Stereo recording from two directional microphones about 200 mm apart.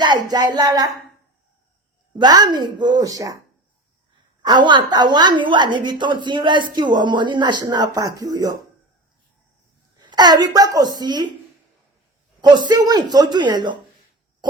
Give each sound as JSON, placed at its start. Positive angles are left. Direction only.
{"t": 0.0, "sound": "a woman's voice", "side_deg": -20}
{"t": 2.1, "sound": "a woman's voice", "side_deg": -20}
{"t": 4.4, "sound": "a woman's voice", "side_deg": -20}
{"t": 10.0, "sound": "a sound", "side_deg": -20}
{"t": 10.5, "sound": "a woman's voice", "side_deg": -20}
{"t": 12.4, "sound": "a woman's voice", "side_deg": -20}